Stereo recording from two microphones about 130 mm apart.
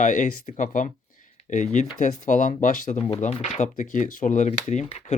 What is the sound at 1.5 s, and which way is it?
Speech, 70° left (ahead or behind).